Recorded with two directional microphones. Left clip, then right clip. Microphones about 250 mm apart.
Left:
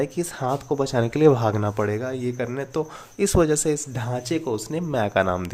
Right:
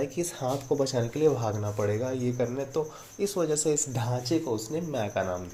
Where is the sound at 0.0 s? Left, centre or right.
Centre.